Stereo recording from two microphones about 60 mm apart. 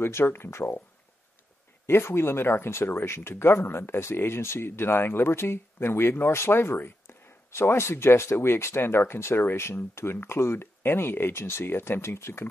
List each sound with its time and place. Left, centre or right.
0.0 s speech: left
1.9 s speech: left